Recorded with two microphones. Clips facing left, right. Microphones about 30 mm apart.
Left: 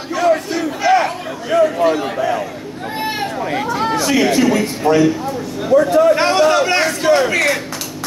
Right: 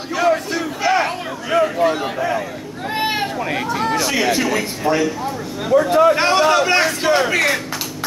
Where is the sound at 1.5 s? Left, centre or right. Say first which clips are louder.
Left 3 dB; right.